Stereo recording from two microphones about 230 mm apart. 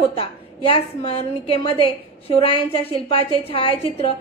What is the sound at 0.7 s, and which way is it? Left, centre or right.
A woman's voice, left.